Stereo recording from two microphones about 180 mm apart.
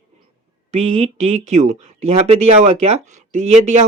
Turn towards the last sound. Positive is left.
turn(degrees=-40)  # may be behind; listen again after turning